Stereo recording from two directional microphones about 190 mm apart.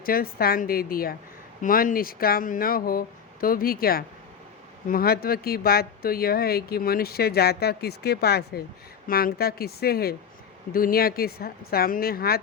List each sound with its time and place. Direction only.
0.0 s a woman's voice: 50° left (ahead or behind)